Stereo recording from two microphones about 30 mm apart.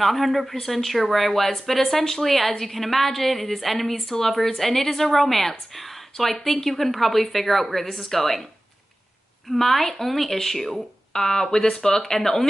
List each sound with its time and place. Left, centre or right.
0.0 s a woman's voice: centre
9.6 s a woman's voice: centre
11.1 s a woman's voice: centre